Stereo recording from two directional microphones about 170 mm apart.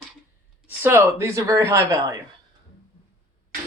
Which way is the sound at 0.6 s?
10° right (ahead or behind).